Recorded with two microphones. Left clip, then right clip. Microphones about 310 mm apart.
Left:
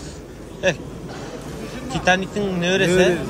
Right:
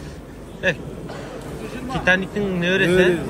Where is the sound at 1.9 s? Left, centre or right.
Centre.